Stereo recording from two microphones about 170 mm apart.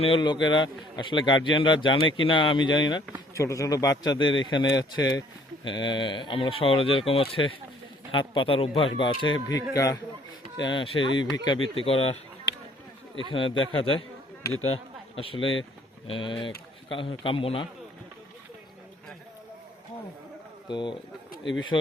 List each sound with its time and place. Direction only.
0.0 s a man's voice: 30° left (ahead or behind)
13.3 s speech: 30° left (ahead or behind)
20.7 s a man's voice: 25° left (ahead or behind)